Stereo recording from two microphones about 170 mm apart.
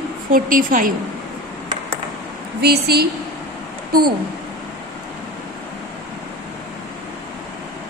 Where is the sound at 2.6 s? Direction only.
70° right (ahead or behind).